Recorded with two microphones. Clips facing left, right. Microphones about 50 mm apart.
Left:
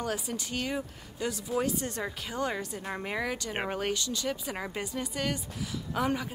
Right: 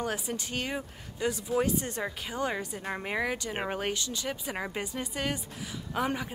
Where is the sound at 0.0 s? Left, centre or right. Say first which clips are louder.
Right 1 dB; right.